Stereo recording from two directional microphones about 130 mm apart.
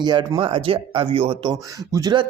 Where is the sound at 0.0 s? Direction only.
35° right (ahead or behind).